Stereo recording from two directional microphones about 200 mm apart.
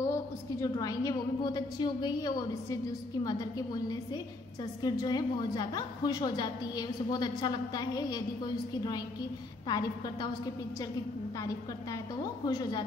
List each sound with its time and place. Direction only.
0.0 s a woman's voice: 15° left (ahead or behind)
9.7 s a woman's voice: 20° left (ahead or behind)
12.4 s a woman's voice: 20° left (ahead or behind)